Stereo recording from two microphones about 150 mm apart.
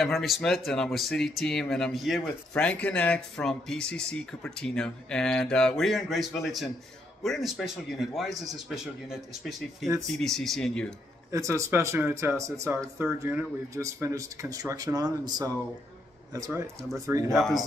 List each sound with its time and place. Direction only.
0.0 s speech: centre (ahead or behind)
11.3 s speech: 20° right (ahead or behind)
17.3 s speech: centre (ahead or behind)